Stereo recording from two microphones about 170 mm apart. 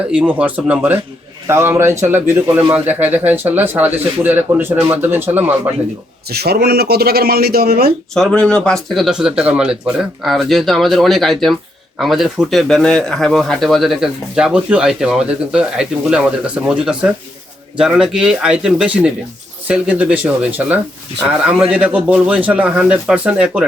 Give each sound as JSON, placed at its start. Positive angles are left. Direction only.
{"t": 0.1, "sound": "a man's voice", "side_deg": -5}
{"t": 6.2, "sound": "a man's voice", "side_deg": -70}
{"t": 8.1, "sound": "a man's voice", "side_deg": 5}